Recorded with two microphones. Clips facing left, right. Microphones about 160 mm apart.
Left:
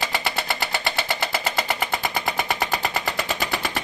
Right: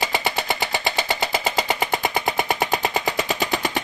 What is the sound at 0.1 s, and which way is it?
Vehicle, 15° right (ahead or behind).